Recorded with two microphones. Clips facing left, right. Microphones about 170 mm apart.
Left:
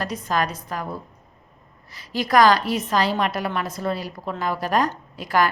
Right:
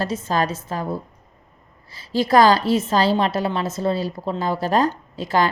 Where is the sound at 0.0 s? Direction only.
25° right (ahead or behind).